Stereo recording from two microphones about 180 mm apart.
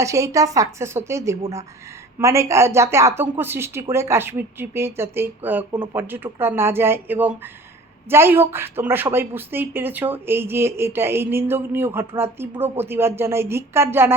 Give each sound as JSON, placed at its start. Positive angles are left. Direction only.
{"t": 0.0, "sound": "a woman's voice", "side_deg": -15}